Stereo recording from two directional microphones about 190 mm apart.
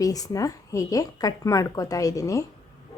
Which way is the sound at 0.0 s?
20° left (ahead or behind).